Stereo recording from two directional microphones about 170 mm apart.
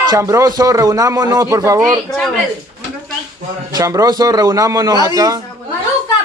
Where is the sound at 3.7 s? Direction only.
20° right (ahead or behind).